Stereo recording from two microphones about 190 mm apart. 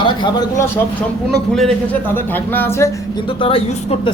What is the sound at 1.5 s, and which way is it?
Speech, 5° left (ahead or behind).